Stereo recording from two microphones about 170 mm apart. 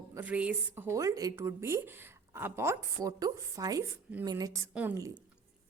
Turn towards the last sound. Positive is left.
turn(degrees=-15)  # may be behind; listen again after turning